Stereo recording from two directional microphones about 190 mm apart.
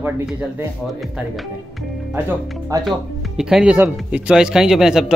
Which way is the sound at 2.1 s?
10° right (ahead or behind).